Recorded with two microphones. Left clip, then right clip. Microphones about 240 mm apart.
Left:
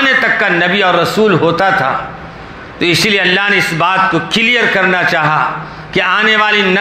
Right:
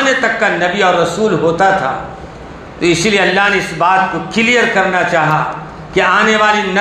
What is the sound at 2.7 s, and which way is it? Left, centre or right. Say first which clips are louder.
A man's voice: left 1 dB; left.